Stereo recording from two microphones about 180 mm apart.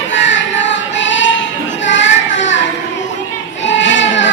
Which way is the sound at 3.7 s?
90° left.